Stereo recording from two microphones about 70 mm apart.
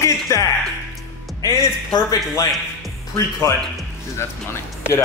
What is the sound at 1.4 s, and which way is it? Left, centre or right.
Music, right.